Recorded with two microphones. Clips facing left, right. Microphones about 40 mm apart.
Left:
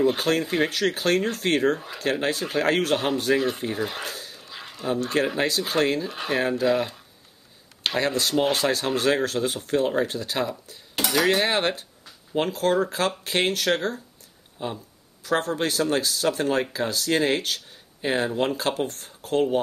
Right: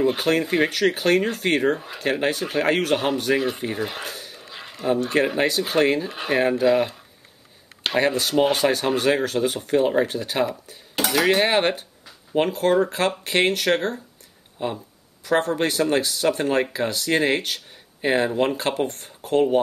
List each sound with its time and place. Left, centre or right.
0.0 s speech: centre
4.3 s a sound: centre
5.6 s speech: centre
8.0 s speech: centre
10.7 s cutlery: centre
11.4 s speech: centre
13.5 s speech: centre
15.5 s speech: centre